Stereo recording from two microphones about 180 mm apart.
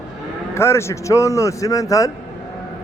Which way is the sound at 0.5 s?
15° left (ahead or behind).